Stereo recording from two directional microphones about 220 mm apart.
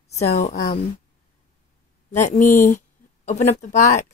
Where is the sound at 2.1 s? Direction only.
35° left (ahead or behind).